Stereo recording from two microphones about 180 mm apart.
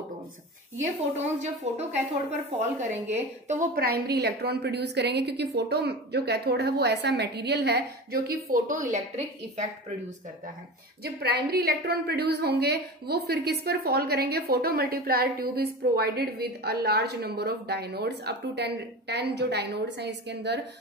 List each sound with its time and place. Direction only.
1.1 s speech: 40° right (ahead or behind)
3.7 s a woman's voice: 60° right (ahead or behind); by 10.1 s 40° right (ahead or behind)
11.1 s a woman's voice: 60° right (ahead or behind)